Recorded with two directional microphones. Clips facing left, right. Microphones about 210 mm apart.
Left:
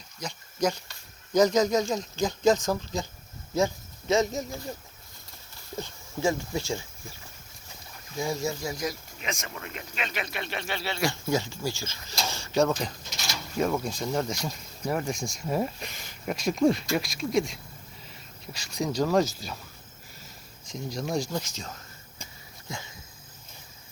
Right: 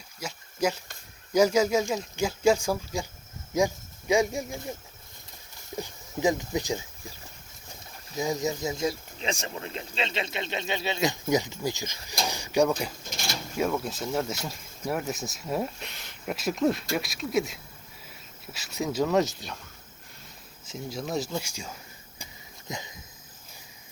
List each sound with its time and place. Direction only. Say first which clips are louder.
0.2 s a sound: even; 5° right (ahead or behind)
1.3 s speech: even; 10° right (ahead or behind)
5.7 s speech: right 1 dB; 15° right (ahead or behind)
8.1 s speech: right 1 dB; 20° right (ahead or behind)
13.6 s speech: left 1 dB; centre (ahead or behind)
20.7 s speech: left 1 dB; 5° right (ahead or behind)
22.2 s wheeze: even; 20° right (ahead or behind)